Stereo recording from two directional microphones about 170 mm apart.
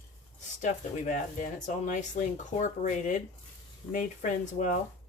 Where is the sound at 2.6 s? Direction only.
45° left (ahead or behind).